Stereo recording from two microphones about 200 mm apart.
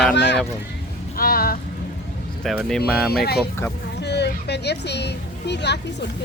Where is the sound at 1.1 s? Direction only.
45° left (ahead or behind).